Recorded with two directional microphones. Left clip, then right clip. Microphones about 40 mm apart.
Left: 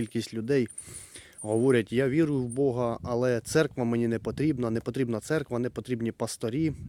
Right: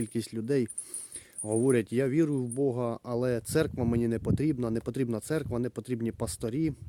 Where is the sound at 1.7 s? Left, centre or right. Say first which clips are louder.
Left 2 dB; centre.